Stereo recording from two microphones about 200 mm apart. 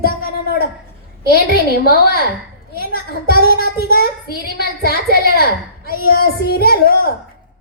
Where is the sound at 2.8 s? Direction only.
45° left (ahead or behind).